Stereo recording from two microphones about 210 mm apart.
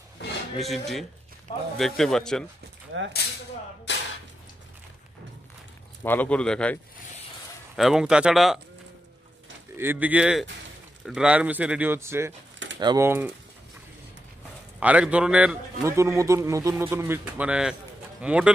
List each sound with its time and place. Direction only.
0.2 s a sound: 55° left (ahead or behind)
0.6 s speech: centre (ahead or behind)
2.9 s speech: 65° right (ahead or behind)
6.0 s speech: 5° left (ahead or behind)
9.8 s a man's voice: 10° right (ahead or behind)
14.8 s a man's voice: 5° right (ahead or behind)